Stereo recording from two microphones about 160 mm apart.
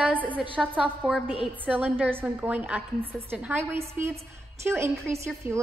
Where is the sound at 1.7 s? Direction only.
10° right (ahead or behind).